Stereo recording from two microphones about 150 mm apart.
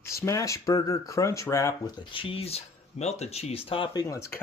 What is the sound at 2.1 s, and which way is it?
Speech, 35° left (ahead or behind).